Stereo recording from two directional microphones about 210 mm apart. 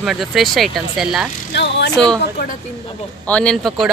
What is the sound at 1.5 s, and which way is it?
Speech, 55° left (ahead or behind).